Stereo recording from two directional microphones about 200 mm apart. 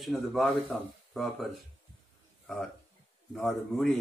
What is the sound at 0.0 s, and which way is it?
A man's voice, centre (ahead or behind).